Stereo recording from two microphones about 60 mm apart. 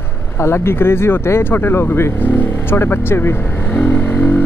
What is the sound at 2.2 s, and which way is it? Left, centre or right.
Speech, left.